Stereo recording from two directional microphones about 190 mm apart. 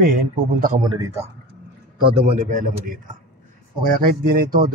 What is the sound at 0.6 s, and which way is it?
Speech, 45° right (ahead or behind).